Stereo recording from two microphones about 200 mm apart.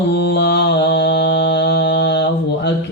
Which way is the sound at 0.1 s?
60° left (ahead or behind).